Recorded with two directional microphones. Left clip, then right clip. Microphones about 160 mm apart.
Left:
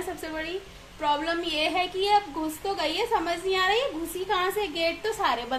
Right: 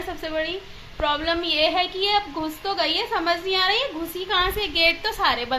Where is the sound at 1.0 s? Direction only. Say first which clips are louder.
Right 3 dB; centre (ahead or behind).